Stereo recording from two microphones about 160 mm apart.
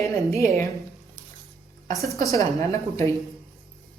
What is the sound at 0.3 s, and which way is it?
Speech, 20° left (ahead or behind).